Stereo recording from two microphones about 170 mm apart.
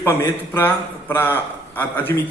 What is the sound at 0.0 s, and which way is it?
A man's voice, 15° left (ahead or behind).